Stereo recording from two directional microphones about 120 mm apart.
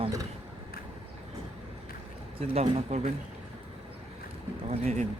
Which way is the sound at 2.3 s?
65° right (ahead or behind).